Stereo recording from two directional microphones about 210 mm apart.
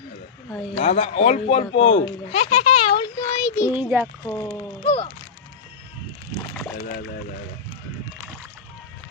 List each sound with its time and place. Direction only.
0.8 s speech: 30° left (ahead or behind); by 3.7 s 15° left (ahead or behind)
3.7 s a child's voice: 10° right (ahead or behind)
4.0 s speech: 10° left (ahead or behind)
4.8 s speech: 25° left (ahead or behind)
6.7 s speech: 45° left (ahead or behind)